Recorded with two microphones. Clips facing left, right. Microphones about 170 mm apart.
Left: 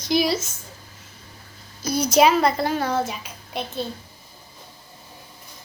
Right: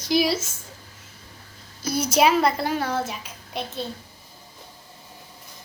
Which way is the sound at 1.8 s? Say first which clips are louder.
Left 3 dB; 5° right (ahead or behind).